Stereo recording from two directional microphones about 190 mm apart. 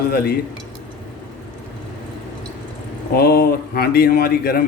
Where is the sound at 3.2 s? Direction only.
50° left (ahead or behind).